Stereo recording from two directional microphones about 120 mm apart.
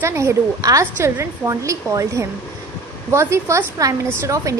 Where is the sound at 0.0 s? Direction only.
20° right (ahead or behind).